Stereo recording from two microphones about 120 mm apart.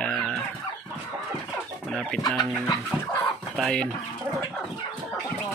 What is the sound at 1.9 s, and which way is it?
Chicken, 5° left (ahead or behind).